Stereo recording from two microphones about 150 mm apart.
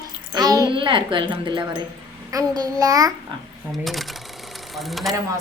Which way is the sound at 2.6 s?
25° right (ahead or behind).